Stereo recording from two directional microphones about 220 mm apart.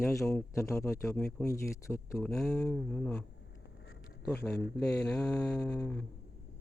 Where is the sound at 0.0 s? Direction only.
10° left (ahead or behind).